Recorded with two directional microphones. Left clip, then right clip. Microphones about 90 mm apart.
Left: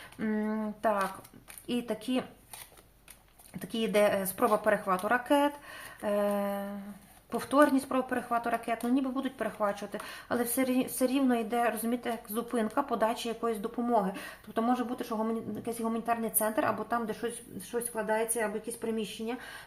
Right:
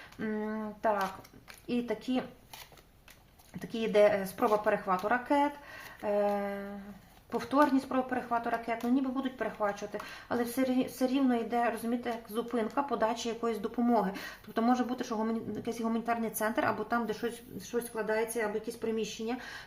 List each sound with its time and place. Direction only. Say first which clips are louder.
0.2 s a sound: left 2 dB; 35° left (ahead or behind)
1.6 s speech: even; 30° left (ahead or behind)
3.6 s speech: right 1 dB; 30° left (ahead or behind)
13.4 s speech: even; centre (ahead or behind)